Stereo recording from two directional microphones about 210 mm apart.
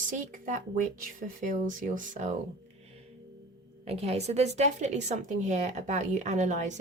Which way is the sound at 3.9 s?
30° right (ahead or behind).